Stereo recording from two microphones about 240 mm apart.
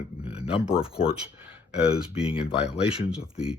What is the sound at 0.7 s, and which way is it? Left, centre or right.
Speech, centre.